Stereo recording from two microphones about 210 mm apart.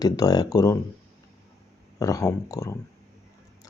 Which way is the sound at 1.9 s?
15° left (ahead or behind).